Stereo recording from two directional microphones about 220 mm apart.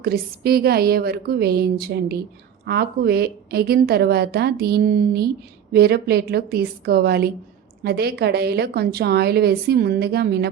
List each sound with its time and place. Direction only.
0.0 s a woman's voice: 45° right (ahead or behind)